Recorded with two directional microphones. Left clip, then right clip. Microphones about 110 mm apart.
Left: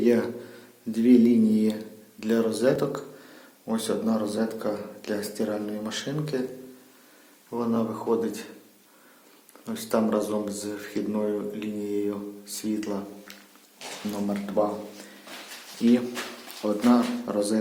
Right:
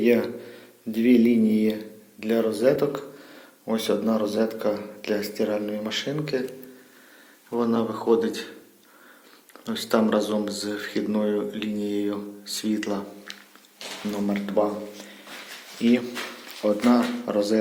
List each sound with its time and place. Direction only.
0.0 s speech: centre (ahead or behind)
2.2 s speech: 15° left (ahead or behind); by 6.4 s centre (ahead or behind)
7.6 s speech: 15° right (ahead or behind)
9.6 s speech: 15° right (ahead or behind)
14.1 s speech: centre (ahead or behind)
15.8 s speech: 5° left (ahead or behind)